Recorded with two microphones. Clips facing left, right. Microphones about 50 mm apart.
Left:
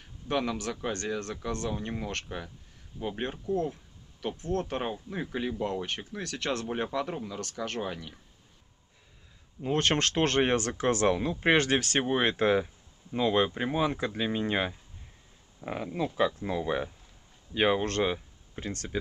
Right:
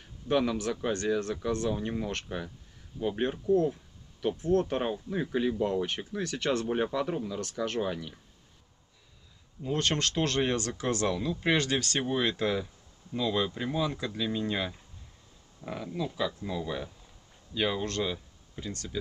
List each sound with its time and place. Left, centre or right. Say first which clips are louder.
0.0 s speech: right 3 dB; centre
9.6 s speech: left 3 dB; left
12.6 s a sound: right 1 dB; left
13.6 s speech: left 3 dB; left